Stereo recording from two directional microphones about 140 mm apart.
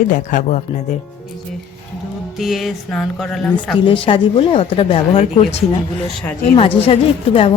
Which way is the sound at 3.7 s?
35° left (ahead or behind).